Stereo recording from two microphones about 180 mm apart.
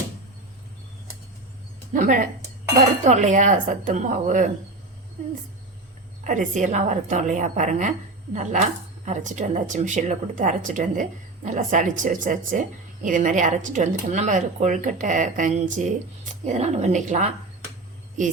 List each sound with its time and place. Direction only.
1.9 s speech: 45° right (ahead or behind)
6.2 s speech: 45° right (ahead or behind)